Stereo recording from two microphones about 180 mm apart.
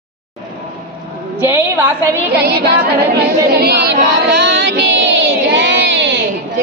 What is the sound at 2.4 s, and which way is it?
Speech, 65° right (ahead or behind).